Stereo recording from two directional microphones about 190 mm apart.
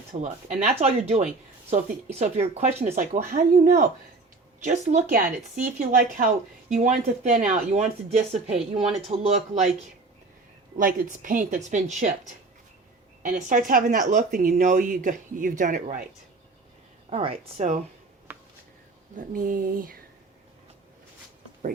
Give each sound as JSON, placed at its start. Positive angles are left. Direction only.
{"t": 0.1, "sound": "speech", "side_deg": -40}
{"t": 10.8, "sound": "speech", "side_deg": -45}
{"t": 13.2, "sound": "speech", "side_deg": -45}
{"t": 17.1, "sound": "speech", "side_deg": -30}
{"t": 18.3, "sound": "a sound", "side_deg": -10}
{"t": 19.1, "sound": "speech", "side_deg": -45}